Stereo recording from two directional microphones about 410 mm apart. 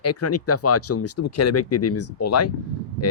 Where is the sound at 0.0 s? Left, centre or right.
Left.